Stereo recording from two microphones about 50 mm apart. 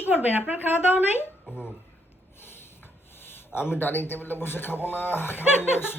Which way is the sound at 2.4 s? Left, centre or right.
Left.